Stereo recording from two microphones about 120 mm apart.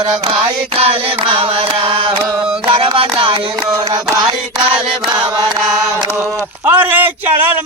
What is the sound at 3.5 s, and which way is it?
Speech, 25° right (ahead or behind).